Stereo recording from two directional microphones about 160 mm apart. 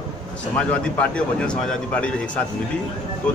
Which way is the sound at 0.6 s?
5° left (ahead or behind).